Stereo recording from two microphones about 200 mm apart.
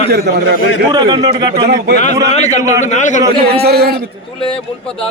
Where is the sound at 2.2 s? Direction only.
35° left (ahead or behind).